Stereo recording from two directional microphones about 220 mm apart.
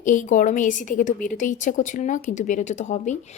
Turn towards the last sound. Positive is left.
turn(degrees=35)  # may be behind; listen again after turning